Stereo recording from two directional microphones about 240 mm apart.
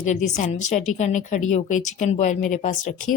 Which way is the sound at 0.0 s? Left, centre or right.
Left.